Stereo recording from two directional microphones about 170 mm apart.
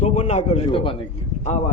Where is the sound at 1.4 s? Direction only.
40° left (ahead or behind).